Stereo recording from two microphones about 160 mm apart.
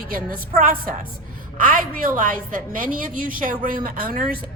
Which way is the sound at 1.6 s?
60° right (ahead or behind).